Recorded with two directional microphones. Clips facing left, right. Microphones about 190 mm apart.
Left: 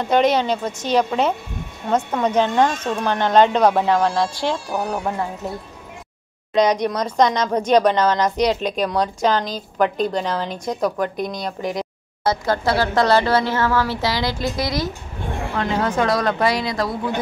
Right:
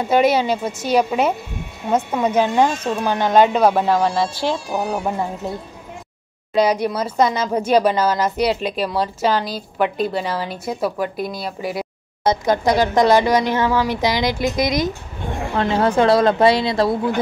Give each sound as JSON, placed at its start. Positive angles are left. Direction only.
{"t": 0.0, "sound": "speech", "side_deg": -5}
{"t": 6.5, "sound": "speech", "side_deg": -5}
{"t": 12.2, "sound": "speech", "side_deg": -20}
{"t": 15.5, "sound": "speech", "side_deg": -30}